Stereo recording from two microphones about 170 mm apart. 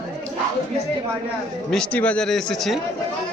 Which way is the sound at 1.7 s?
5° left (ahead or behind).